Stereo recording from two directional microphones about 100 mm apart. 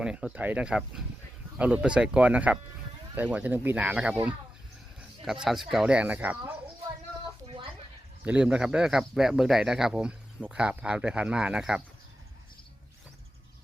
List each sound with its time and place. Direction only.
0.0 s speech: 10° right (ahead or behind)
4.9 s speech: 5° right (ahead or behind)
8.2 s speech: 10° right (ahead or behind)